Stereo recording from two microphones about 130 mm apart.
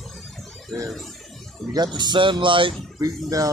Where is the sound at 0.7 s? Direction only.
Centre (ahead or behind).